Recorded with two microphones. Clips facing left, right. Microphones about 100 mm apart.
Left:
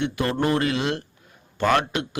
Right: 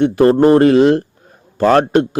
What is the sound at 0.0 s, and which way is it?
A man's voice, 40° right (ahead or behind).